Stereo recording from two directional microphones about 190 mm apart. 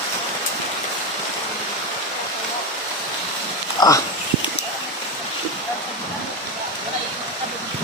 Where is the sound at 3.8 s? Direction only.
15° left (ahead or behind).